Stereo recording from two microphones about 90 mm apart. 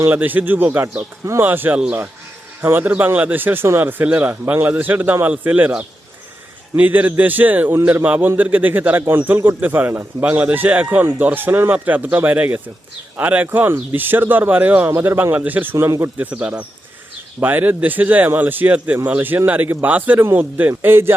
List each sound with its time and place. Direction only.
0.0 s a man's voice: 20° right (ahead or behind)
15.7 s speech: 35° right (ahead or behind)
16.1 s a man's voice: 15° right (ahead or behind)